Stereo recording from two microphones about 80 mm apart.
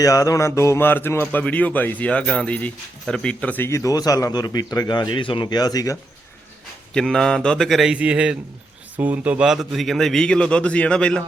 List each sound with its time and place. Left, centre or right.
0.0 s a man's voice: left; by 3.6 s centre
3.6 s speech: left
3.9 s a man's voice: left
5.5 s speech: left
6.9 s a man's voice: centre
7.9 s a man's voice: centre
9.5 s a man's voice: centre